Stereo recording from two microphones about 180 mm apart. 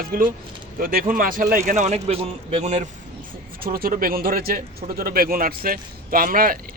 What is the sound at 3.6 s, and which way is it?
A man's voice, 55° right (ahead or behind).